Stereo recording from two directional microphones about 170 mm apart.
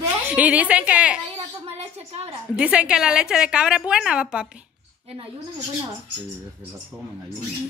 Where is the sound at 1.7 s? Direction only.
40° right (ahead or behind).